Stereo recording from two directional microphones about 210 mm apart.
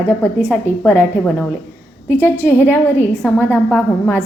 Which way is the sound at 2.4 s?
10° left (ahead or behind).